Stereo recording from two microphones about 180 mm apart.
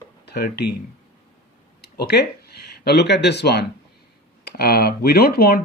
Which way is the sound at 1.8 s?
65° left (ahead or behind).